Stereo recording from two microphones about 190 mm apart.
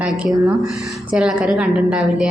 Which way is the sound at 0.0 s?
5° right (ahead or behind).